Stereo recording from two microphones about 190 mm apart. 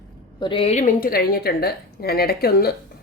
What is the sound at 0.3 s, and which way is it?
A woman's voice, 25° left (ahead or behind).